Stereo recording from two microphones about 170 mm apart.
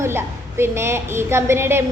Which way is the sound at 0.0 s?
15° right (ahead or behind).